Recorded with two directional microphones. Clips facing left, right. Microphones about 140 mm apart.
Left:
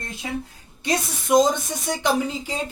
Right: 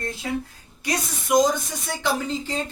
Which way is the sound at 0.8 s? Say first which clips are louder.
Left 3 dB; 25° left (ahead or behind).